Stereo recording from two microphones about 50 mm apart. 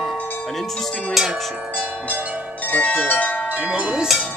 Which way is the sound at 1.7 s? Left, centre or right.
Right.